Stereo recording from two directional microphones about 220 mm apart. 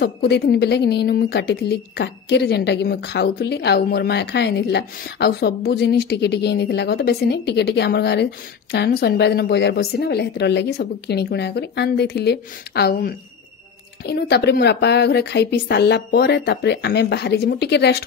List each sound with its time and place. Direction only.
0.0 s speech: 45° left (ahead or behind)